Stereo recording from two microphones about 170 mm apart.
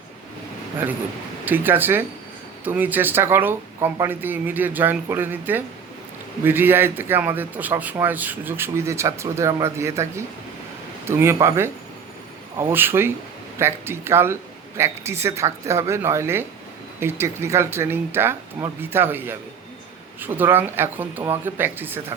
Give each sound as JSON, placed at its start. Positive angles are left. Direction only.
{"t": 1.5, "sound": "speech", "side_deg": -10}